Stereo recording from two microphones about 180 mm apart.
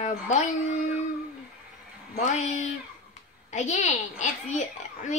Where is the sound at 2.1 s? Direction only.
40° left (ahead or behind).